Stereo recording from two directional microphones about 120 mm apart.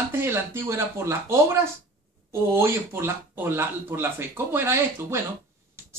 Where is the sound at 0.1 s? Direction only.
20° right (ahead or behind).